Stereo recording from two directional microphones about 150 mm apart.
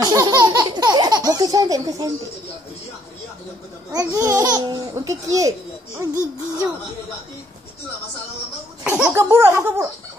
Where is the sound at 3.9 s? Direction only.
20° right (ahead or behind).